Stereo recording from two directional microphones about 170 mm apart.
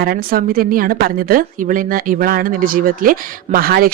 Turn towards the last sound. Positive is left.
turn(degrees=-60)  # may be behind; listen again after turning